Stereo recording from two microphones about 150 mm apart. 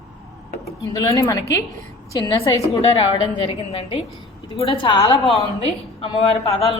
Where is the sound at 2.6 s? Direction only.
40° left (ahead or behind).